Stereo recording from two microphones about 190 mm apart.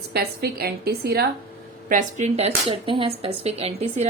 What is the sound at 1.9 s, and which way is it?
A woman's voice, 40° right (ahead or behind).